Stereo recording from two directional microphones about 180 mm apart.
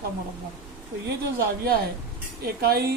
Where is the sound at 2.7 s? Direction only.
60° right (ahead or behind).